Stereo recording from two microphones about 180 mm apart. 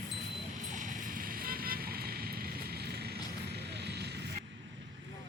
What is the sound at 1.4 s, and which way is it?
Vehicle, 55° right (ahead or behind).